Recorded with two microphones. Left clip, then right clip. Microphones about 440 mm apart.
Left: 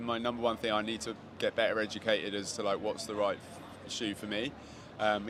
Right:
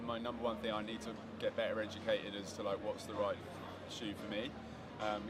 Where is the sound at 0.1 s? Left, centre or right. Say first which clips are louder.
Left 8 dB; left.